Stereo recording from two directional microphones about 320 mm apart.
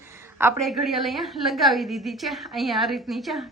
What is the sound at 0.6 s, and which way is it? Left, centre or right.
A woman's voice, centre.